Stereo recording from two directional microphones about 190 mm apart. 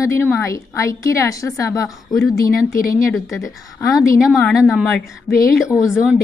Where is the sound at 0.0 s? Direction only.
15° left (ahead or behind).